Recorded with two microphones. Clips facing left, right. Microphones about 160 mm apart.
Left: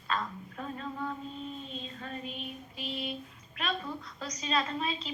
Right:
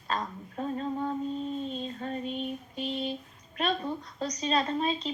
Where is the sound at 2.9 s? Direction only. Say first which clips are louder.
Right 4 dB; 35° right (ahead or behind).